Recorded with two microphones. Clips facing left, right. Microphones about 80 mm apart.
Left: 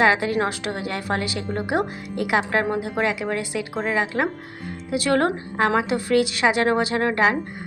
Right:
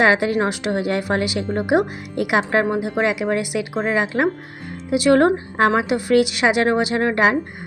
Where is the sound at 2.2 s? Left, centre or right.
Right.